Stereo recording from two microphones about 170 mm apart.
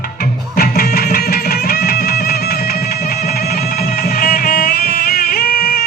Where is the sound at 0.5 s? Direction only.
60° left (ahead or behind).